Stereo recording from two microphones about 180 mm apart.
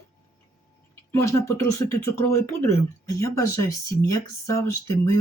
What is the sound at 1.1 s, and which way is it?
Speech, 15° left (ahead or behind).